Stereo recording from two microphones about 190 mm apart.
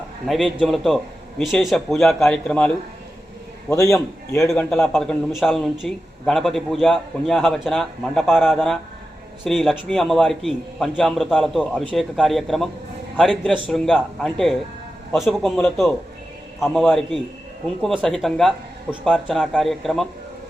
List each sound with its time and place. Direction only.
0.3 s a man's voice: centre (ahead or behind)
3.7 s a man's voice: 15° left (ahead or behind)
4.4 s a man's voice: centre (ahead or behind)